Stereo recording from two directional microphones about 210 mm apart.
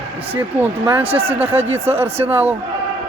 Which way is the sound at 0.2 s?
25° right (ahead or behind).